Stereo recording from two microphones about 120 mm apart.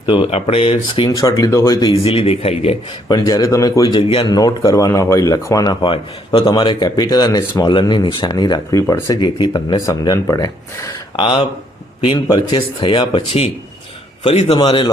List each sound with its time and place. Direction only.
0.0 s speech: 40° left (ahead or behind)
0.3 s speech: 55° left (ahead or behind)
1.0 s speech: 35° left (ahead or behind)
1.9 s speech: 50° left (ahead or behind)
3.1 s speech: 30° left (ahead or behind)
5.8 s speech: 45° left (ahead or behind); by 9.0 s 25° left (ahead or behind)
9.0 s speech: 40° left (ahead or behind)
11.2 s speech: 45° left (ahead or behind)
14.6 s speech: 45° left (ahead or behind)